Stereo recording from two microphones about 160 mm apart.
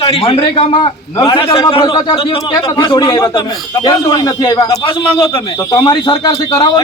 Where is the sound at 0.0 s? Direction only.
35° left (ahead or behind).